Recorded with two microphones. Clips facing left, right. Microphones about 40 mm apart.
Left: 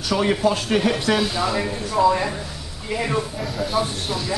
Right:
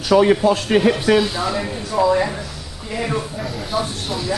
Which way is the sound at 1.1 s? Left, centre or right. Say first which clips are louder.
Right 3 dB; centre.